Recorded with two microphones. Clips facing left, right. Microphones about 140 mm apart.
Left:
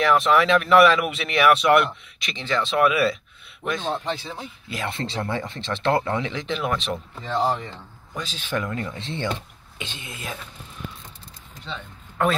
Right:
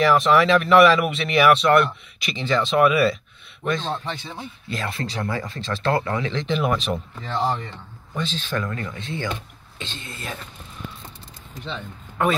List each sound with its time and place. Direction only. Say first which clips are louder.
0.0 s speech: right 2 dB; centre (ahead or behind)
2.1 s speech: right 3 dB; 5° right (ahead or behind)
3.6 s speech: even; 10° left (ahead or behind)
4.8 s speech: left 1 dB; 25° left (ahead or behind)
6.3 s speech: right 3 dB; centre (ahead or behind)
8.1 s speech: right 5 dB; 5° left (ahead or behind)
8.5 s speech: even; 15° left (ahead or behind)
9.8 s speech: right 1 dB; 15° left (ahead or behind)